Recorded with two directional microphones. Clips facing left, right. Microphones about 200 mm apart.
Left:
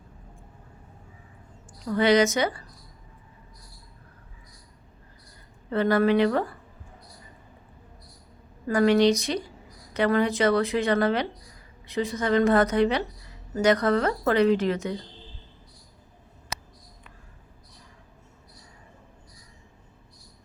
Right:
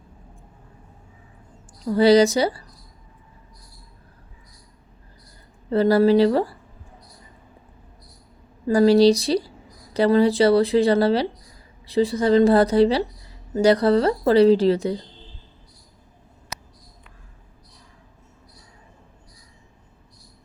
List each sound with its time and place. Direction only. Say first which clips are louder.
1.8 s speech: right 6 dB; 35° right (ahead or behind)
5.7 s speech: right 5 dB; 35° right (ahead or behind)
8.6 s speech: right 5 dB; 30° right (ahead or behind)